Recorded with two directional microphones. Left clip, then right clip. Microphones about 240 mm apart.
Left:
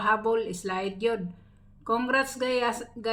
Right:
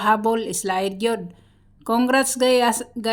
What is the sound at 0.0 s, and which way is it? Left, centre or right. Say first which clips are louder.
A woman's voice: right 5 dB; right.